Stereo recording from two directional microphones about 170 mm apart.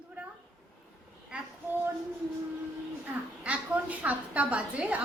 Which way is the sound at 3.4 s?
10° right (ahead or behind).